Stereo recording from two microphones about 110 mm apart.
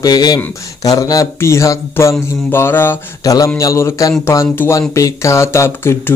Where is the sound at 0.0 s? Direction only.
35° left (ahead or behind); by 3.0 s 20° left (ahead or behind).